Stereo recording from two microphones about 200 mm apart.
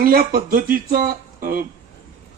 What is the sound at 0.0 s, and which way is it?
Speech, 45° right (ahead or behind).